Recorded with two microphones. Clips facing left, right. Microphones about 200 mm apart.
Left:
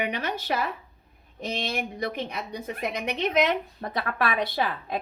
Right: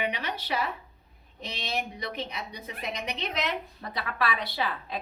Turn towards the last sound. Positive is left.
turn(degrees=50)  # may be behind; listen again after turning